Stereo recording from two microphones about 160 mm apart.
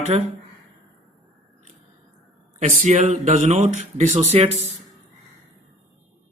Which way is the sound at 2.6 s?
50° right (ahead or behind).